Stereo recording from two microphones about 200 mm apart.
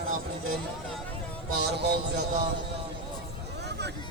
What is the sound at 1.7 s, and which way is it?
Speech, 55° right (ahead or behind).